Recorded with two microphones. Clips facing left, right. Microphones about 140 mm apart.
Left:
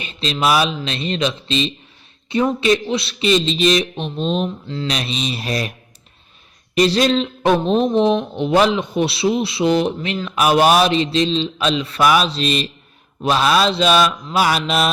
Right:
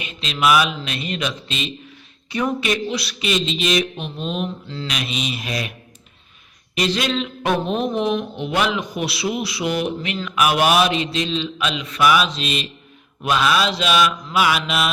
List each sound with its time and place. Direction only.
0.0 s a man's voice: 35° left (ahead or behind)
6.7 s speech: 35° left (ahead or behind)